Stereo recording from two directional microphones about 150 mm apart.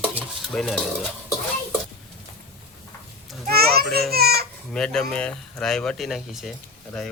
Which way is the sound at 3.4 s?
90° right.